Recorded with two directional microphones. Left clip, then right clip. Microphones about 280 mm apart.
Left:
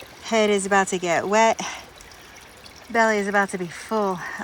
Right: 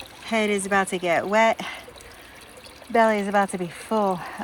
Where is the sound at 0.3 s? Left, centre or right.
Centre.